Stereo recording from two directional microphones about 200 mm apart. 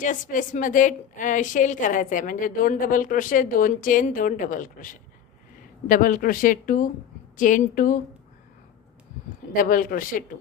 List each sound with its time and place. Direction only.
0.0 s a woman's voice: 40° left (ahead or behind)
9.5 s speech: 45° left (ahead or behind)